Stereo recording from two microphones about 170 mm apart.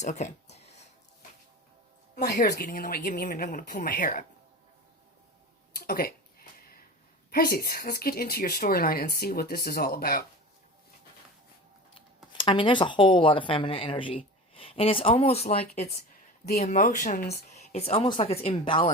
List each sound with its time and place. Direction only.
0.0 s a sound: 45° left (ahead or behind)
2.1 s a woman's voice: 65° left (ahead or behind)
5.8 s a woman's voice: 60° left (ahead or behind)
7.3 s a woman's voice: 60° left (ahead or behind)
11.9 s speech: 30° left (ahead or behind)